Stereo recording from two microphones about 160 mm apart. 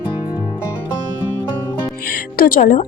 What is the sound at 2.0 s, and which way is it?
Music, 70° left (ahead or behind).